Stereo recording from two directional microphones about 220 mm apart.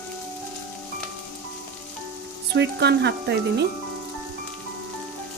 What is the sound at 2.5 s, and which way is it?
Speech, 50° right (ahead or behind).